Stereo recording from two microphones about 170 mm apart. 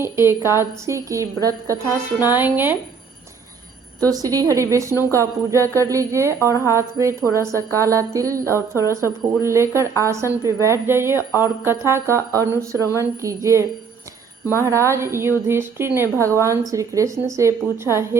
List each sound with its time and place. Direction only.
0.0 s speech: 15° right (ahead or behind)
4.0 s a woman's voice: 20° right (ahead or behind)